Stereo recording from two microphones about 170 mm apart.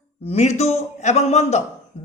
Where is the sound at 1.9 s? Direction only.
35° left (ahead or behind).